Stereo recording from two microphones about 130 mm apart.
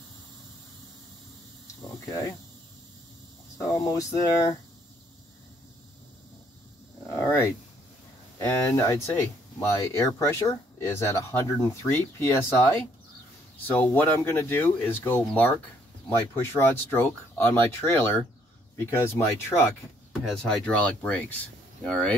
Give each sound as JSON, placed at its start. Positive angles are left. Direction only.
{"t": 3.5, "sound": "speech", "side_deg": 25}
{"t": 7.1, "sound": "a sound", "side_deg": 20}
{"t": 8.4, "sound": "speech", "side_deg": 20}
{"t": 20.1, "sound": "speech", "side_deg": 0}